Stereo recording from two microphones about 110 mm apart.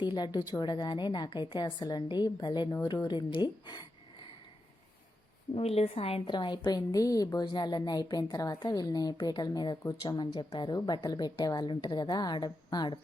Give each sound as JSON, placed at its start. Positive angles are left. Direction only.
{"t": 0.0, "sound": "a woman's voice", "side_deg": 40}
{"t": 5.5, "sound": "a woman's voice", "side_deg": 65}
{"t": 6.3, "sound": "a woman's voice", "side_deg": 45}